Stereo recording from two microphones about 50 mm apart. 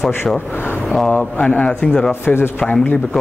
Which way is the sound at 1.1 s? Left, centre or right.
Left.